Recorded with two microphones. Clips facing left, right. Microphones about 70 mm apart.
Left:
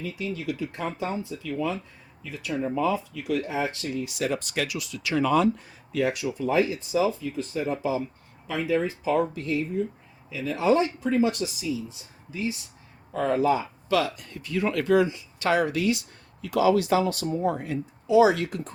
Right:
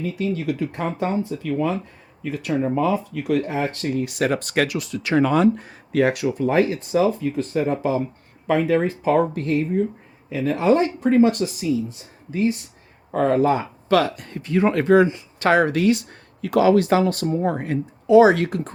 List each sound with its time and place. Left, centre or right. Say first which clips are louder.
0.0 s speech: right 7 dB; right